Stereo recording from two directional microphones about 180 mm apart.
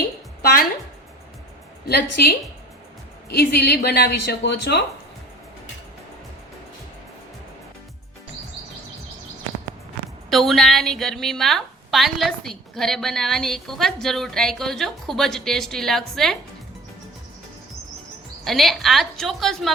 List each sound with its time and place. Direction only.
2.2 s a woman's voice: 60° left (ahead or behind)
3.3 s a woman's voice: 65° left (ahead or behind)
10.2 s a woman's voice: centre (ahead or behind)
18.4 s a woman's voice: centre (ahead or behind)